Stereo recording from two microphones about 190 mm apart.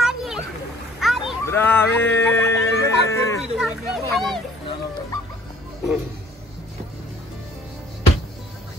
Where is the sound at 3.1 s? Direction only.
15° left (ahead or behind).